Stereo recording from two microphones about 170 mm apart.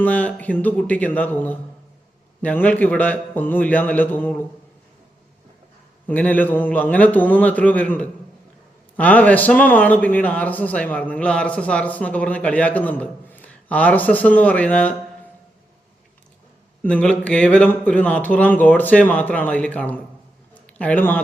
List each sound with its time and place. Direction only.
0.0 s a man's voice: 10° left (ahead or behind)
6.1 s a man's voice: 10° left (ahead or behind)
16.8 s a man's voice: 5° left (ahead or behind)
20.5 s a sound: 10° left (ahead or behind)